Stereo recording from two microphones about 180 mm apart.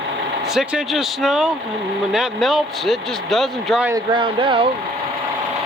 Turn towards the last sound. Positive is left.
turn(degrees=-30)  # may be behind; listen again after turning